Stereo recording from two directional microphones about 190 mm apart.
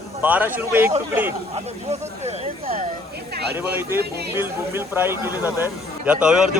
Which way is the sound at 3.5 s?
10° right (ahead or behind).